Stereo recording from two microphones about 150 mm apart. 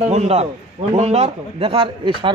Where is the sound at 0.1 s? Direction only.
45° right (ahead or behind).